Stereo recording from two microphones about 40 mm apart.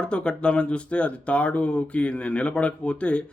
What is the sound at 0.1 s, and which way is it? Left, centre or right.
Speech, left.